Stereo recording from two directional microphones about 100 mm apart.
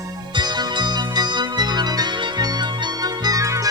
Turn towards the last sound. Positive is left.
turn(degrees=-35)  # may be behind; listen again after turning